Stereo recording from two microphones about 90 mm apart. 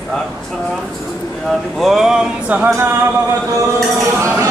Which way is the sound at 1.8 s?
5° right (ahead or behind).